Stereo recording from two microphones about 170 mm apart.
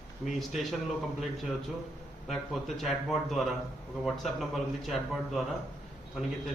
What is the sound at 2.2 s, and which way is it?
Speech, centre (ahead or behind).